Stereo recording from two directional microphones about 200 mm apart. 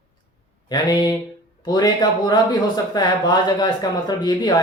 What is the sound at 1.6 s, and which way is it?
Speech, 20° left (ahead or behind).